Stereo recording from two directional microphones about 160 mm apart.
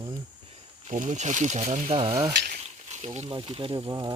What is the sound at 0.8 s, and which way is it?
Speech, 50° right (ahead or behind).